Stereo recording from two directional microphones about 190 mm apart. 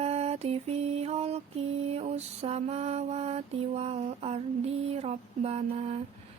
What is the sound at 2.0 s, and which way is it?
Speech, 35° right (ahead or behind).